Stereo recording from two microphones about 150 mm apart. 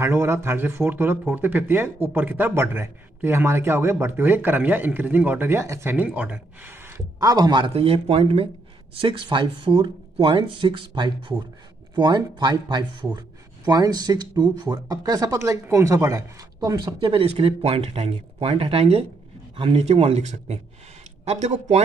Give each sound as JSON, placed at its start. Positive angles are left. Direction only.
{"t": 0.0, "sound": "a man's voice", "side_deg": -20}